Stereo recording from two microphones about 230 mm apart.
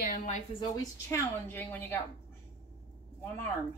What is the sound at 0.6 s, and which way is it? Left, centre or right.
A woman's voice, centre.